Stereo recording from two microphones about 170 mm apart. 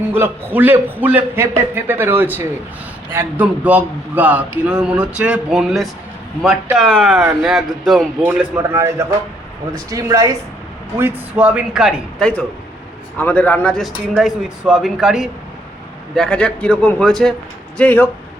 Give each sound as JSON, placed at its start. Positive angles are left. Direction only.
{"t": 0.1, "sound": "a man's voice", "side_deg": -10}
{"t": 12.2, "sound": "speech", "side_deg": 5}